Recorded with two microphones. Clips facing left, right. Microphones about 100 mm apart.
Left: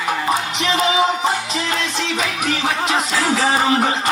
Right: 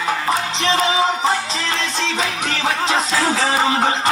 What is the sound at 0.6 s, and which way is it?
Music, 35° right (ahead or behind).